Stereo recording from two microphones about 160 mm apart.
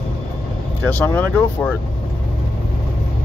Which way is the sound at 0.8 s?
10° left (ahead or behind).